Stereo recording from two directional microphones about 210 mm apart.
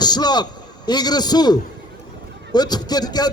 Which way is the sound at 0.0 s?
20° left (ahead or behind).